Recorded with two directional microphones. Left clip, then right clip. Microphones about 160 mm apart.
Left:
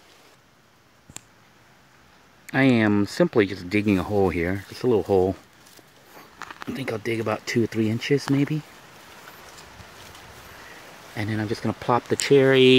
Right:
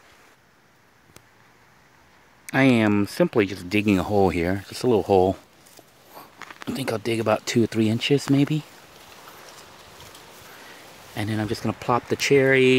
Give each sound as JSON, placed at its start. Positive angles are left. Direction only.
{"t": 2.5, "sound": "speech", "side_deg": -10}
{"t": 11.1, "sound": "speech", "side_deg": -15}
{"t": 12.4, "sound": "speech", "side_deg": 0}